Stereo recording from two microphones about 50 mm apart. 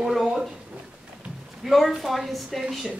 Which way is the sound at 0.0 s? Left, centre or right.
Centre.